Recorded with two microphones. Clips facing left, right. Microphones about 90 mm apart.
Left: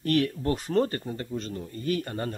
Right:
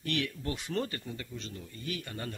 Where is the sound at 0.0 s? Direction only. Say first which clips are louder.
Left 9 dB; 40° left (ahead or behind).